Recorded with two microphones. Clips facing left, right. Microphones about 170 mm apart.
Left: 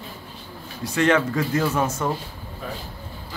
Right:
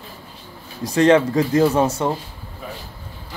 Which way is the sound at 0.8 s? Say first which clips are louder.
Right 6 dB; 35° right (ahead or behind).